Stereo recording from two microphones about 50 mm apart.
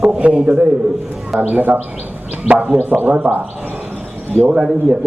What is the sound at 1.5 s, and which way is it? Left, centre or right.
A man's voice, right.